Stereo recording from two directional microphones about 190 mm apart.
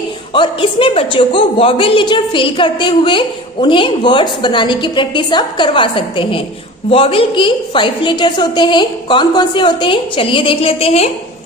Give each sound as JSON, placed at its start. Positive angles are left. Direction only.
{"t": 0.3, "sound": "a woman's voice", "side_deg": 25}